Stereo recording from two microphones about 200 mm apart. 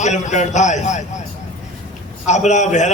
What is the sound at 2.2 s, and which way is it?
Speech, 35° left (ahead or behind).